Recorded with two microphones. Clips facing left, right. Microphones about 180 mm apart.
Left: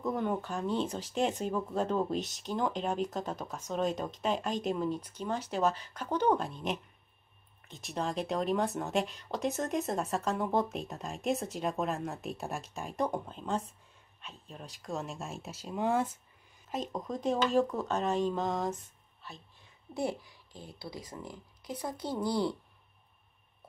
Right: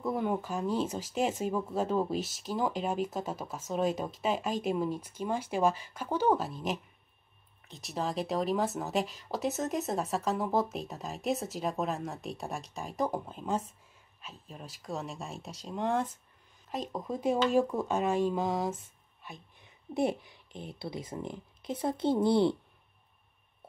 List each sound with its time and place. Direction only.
0.0 s speech: 10° right (ahead or behind)
19.2 s a child's voice: 20° right (ahead or behind)